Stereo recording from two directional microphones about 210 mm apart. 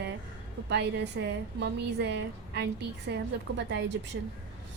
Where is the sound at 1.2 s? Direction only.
60° right (ahead or behind).